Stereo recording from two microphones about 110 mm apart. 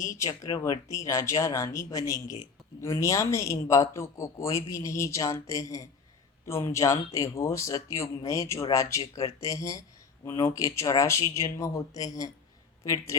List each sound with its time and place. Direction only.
0.0 s a man's voice: 30° left (ahead or behind)